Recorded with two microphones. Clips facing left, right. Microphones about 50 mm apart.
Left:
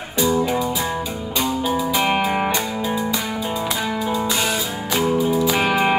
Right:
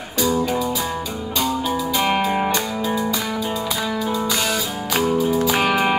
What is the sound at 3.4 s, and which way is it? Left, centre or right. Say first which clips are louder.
Music: even; left.